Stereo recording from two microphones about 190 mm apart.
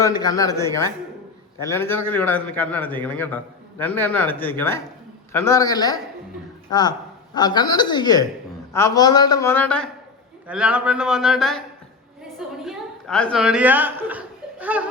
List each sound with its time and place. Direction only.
0.0 s a man's voice: 20° left (ahead or behind)
10.4 s a man's voice: 5° right (ahead or behind)
12.6 s speech: 5° left (ahead or behind)